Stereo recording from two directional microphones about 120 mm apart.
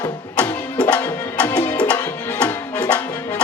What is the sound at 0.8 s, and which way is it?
Music, 10° left (ahead or behind).